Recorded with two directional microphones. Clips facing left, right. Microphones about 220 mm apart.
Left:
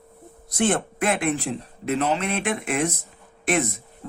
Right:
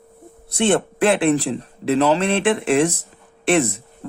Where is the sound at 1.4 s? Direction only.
90° right.